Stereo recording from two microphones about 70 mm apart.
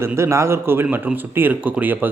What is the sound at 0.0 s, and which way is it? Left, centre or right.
Speech, right.